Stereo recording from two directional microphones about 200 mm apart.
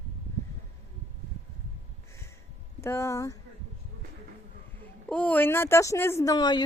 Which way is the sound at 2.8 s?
15° left (ahead or behind).